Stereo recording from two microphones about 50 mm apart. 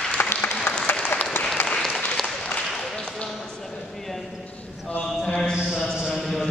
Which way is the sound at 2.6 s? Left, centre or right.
Centre.